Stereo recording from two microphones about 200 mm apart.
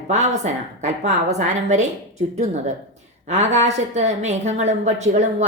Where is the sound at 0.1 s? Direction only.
35° right (ahead or behind).